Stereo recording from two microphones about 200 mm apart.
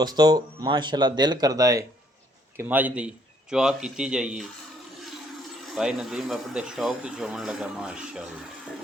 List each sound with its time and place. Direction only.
0.0 s a man's voice: 20° right (ahead or behind)
5.7 s speech: 5° right (ahead or behind)